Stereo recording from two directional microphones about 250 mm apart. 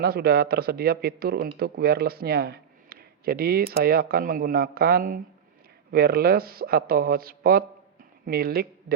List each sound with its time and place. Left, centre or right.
0.0 s speech: right